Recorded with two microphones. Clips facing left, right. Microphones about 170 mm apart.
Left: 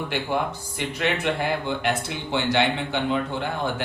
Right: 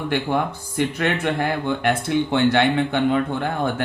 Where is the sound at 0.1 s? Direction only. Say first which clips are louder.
Right 5 dB; 55° right (ahead or behind).